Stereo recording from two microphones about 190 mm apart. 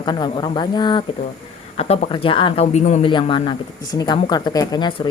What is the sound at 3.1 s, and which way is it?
Speech, 25° left (ahead or behind).